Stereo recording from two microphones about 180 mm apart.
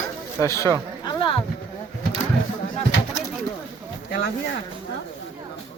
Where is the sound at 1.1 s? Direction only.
30° left (ahead or behind).